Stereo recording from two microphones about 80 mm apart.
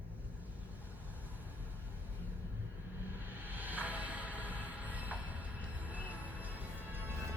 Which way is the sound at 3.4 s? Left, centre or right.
Right.